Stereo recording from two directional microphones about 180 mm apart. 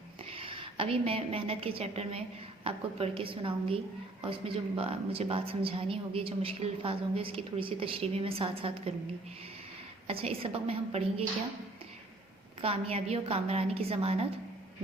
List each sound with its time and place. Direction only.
0.3 s a woman's voice: 30° right (ahead or behind)
10.1 s a woman's voice: 30° right (ahead or behind)
12.6 s a woman's voice: 35° right (ahead or behind)